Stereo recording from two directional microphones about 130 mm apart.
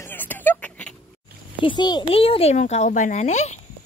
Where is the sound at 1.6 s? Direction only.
35° left (ahead or behind).